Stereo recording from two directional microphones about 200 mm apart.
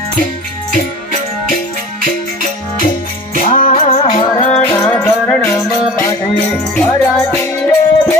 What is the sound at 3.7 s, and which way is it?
Music, 30° left (ahead or behind).